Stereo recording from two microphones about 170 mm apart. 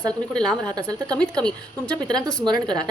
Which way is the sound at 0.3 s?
5° left (ahead or behind).